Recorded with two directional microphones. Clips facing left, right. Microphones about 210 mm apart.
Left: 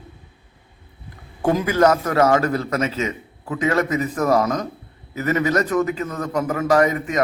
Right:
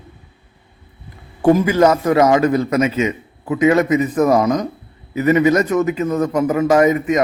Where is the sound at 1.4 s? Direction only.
10° right (ahead or behind).